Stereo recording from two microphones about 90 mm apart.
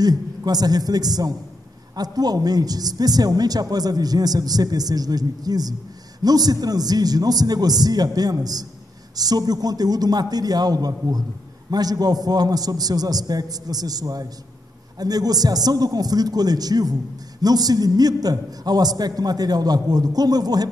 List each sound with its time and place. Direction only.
0.0 s a man's voice: 45° right (ahead or behind)